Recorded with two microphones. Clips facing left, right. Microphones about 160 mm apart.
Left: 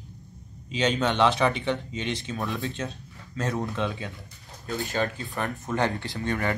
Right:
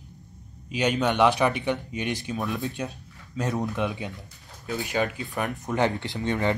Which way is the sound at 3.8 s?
15° right (ahead or behind).